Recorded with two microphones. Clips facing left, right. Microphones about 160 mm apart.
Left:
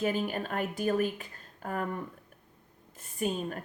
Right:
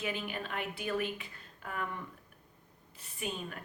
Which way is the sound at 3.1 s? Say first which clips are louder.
Left 8 dB; 45° left (ahead or behind).